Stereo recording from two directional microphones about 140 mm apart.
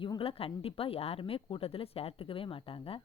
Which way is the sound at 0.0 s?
40° left (ahead or behind).